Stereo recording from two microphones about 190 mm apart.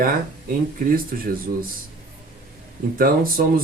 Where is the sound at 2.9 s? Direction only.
50° right (ahead or behind).